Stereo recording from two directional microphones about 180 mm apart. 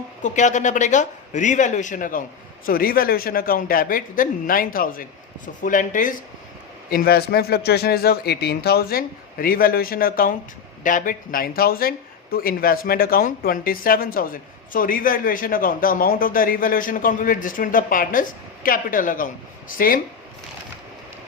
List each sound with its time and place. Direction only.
0.2 s speech: 45° left (ahead or behind)